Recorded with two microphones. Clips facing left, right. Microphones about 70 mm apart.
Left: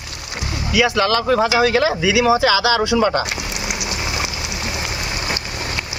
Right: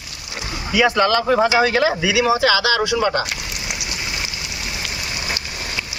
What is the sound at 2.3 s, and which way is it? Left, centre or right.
Speech, centre.